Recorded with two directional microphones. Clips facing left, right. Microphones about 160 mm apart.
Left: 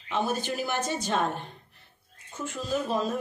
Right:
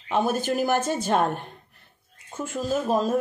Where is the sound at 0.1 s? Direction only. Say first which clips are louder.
Right 5 dB; 50° right (ahead or behind).